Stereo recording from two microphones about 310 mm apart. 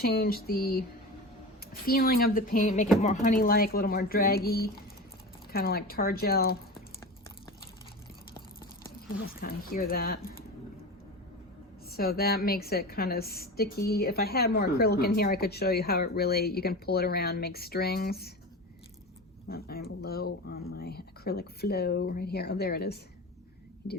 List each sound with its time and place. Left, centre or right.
0.0 s a woman's voice: left
9.4 s a woman's voice: left
11.9 s a woman's voice: left
19.5 s speech: left